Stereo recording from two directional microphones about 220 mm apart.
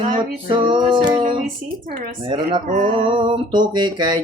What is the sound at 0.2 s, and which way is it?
Music, 20° right (ahead or behind).